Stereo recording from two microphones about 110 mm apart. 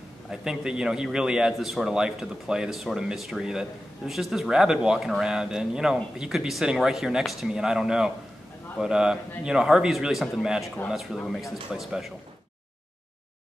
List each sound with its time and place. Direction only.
0.3 s a man's voice: 5° right (ahead or behind)